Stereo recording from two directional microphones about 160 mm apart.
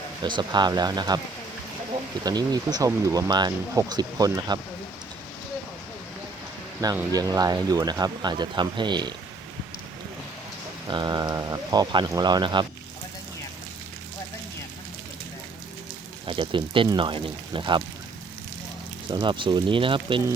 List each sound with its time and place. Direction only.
0.2 s speech: 30° right (ahead or behind)
2.2 s speech: 25° right (ahead or behind)
7.1 s speech: 25° right (ahead or behind)
10.8 s speech: 25° right (ahead or behind)
16.2 s speech: 30° right (ahead or behind)
19.1 s speech: 30° right (ahead or behind)